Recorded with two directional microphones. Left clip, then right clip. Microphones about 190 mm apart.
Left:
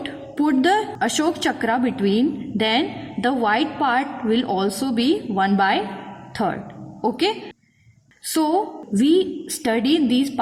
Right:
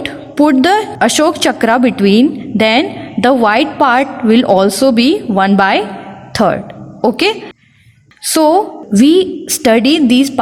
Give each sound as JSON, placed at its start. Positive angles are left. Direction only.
{"t": 0.0, "sound": "a woman's voice", "side_deg": -35}